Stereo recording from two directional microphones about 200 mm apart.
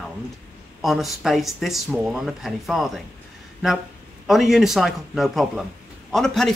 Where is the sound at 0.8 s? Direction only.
Centre (ahead or behind).